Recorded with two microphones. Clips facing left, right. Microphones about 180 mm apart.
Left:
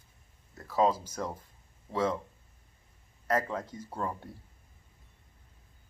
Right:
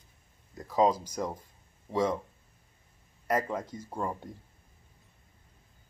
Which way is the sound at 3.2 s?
10° right (ahead or behind).